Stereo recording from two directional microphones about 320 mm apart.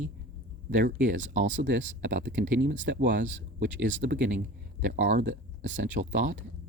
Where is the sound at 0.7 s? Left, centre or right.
Right.